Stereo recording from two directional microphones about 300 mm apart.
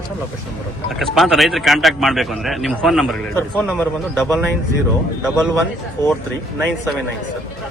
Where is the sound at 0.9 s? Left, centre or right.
Centre.